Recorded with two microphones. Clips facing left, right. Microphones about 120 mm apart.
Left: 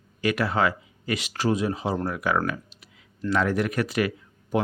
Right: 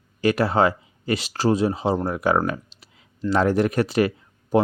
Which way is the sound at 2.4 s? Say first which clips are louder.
Right 3 dB; 30° right (ahead or behind).